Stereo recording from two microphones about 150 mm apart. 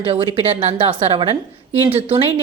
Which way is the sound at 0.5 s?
45° right (ahead or behind).